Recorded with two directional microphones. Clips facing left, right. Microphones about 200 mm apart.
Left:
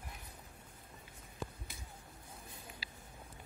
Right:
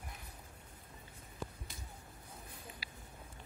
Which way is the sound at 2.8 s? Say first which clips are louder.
Even; 25° left (ahead or behind).